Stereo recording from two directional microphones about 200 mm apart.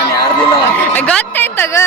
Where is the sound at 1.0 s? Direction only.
5° left (ahead or behind).